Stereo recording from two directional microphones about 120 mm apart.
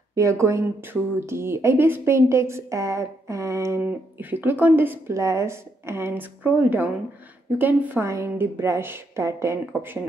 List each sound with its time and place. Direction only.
0.1 s speech: 25° right (ahead or behind)